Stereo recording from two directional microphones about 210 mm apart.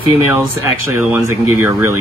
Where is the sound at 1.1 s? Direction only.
10° right (ahead or behind).